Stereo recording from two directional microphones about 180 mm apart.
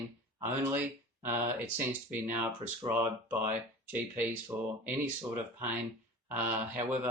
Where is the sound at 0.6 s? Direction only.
10° right (ahead or behind).